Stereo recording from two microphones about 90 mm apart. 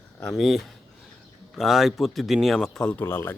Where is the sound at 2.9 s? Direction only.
25° left (ahead or behind).